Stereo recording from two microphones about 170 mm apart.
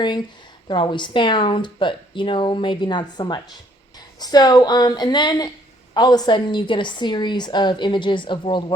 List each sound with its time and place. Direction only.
0.7 s speech: 25° left (ahead or behind)